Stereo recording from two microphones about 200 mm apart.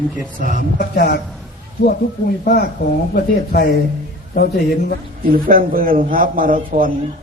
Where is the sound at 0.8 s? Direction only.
50° left (ahead or behind).